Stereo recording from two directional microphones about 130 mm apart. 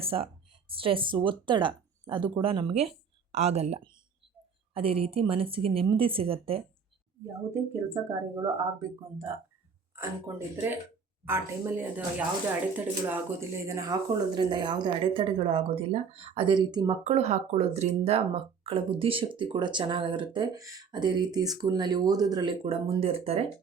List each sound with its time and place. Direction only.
0.0 s speech: 45° right (ahead or behind)
3.3 s speech: 60° right (ahead or behind)
7.3 s speech: 20° right (ahead or behind)
13.7 s speech: 25° right (ahead or behind)
17.0 s speech: 55° right (ahead or behind); by 20.5 s 40° right (ahead or behind)
20.6 s speech: 25° right (ahead or behind)
22.6 s speech: 50° right (ahead or behind)